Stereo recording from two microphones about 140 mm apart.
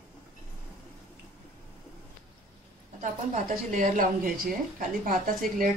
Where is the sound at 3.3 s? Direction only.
60° right (ahead or behind); by 5.1 s 85° right.